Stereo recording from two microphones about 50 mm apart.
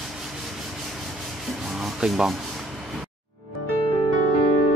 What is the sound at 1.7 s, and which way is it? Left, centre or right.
Rub, centre.